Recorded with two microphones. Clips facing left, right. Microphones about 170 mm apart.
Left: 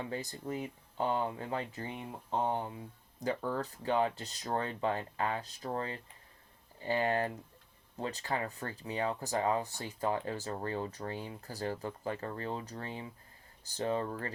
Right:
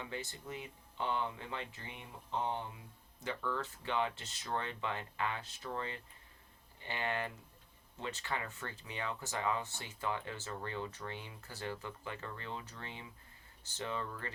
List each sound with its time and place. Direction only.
0.0 s speech: 40° left (ahead or behind)